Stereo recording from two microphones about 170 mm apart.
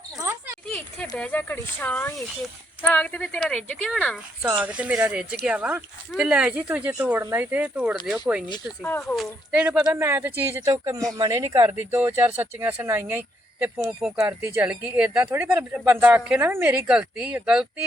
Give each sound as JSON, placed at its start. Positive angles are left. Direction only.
{"t": 1.1, "sound": "a woman's voice", "side_deg": 10}
{"t": 4.4, "sound": "speech", "side_deg": -10}
{"t": 8.8, "sound": "speech", "side_deg": 10}
{"t": 9.1, "sound": "speech", "side_deg": -5}